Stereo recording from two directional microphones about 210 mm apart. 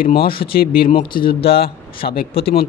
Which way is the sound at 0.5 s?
45° left (ahead or behind).